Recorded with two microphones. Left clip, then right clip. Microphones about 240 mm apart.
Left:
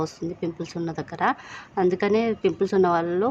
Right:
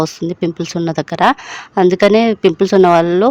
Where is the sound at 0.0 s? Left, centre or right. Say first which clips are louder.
Right 11 dB; right.